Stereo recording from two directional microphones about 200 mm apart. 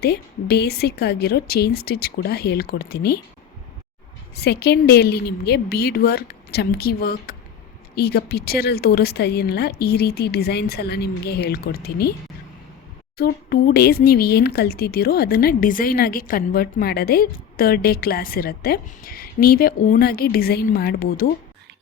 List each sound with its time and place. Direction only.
0.0 s speech: 55° left (ahead or behind)
4.4 s speech: 55° left (ahead or behind)
13.1 s speech: 50° left (ahead or behind)